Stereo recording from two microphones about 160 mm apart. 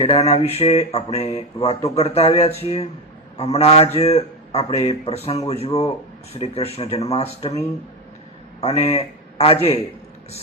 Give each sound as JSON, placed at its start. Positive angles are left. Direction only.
{"t": 0.0, "sound": "speech", "side_deg": 40}
{"t": 8.6, "sound": "a man's voice", "side_deg": 40}